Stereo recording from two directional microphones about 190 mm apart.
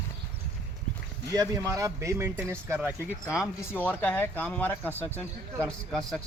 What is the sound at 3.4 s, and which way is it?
Speech, 10° left (ahead or behind).